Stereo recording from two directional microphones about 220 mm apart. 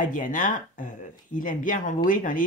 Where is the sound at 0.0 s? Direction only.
35° left (ahead or behind).